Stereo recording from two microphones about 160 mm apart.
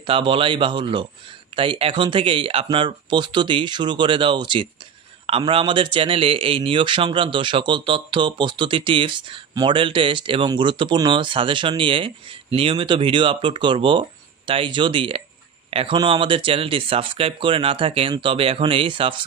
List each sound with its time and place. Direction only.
0.0 s speech: 35° right (ahead or behind)